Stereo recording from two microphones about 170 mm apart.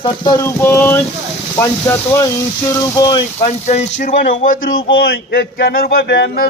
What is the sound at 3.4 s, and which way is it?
Speech, 40° left (ahead or behind).